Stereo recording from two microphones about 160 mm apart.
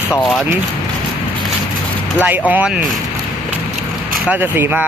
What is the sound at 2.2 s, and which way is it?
Speech, 10° right (ahead or behind).